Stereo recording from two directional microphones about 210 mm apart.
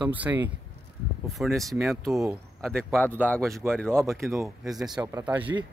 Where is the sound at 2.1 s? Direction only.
15° right (ahead or behind).